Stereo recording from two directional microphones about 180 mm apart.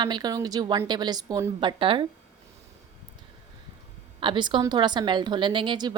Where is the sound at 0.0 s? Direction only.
25° right (ahead or behind).